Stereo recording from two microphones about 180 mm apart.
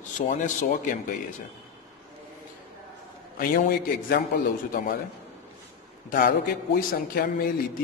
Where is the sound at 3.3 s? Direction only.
55° left (ahead or behind).